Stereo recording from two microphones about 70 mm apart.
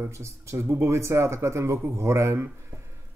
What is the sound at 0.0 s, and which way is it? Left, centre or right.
Speech, right.